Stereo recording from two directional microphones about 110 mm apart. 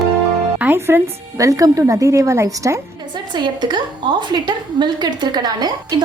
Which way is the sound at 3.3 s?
40° right (ahead or behind).